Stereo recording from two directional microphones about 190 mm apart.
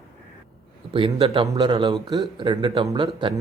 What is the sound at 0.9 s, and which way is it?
Speech, 30° right (ahead or behind).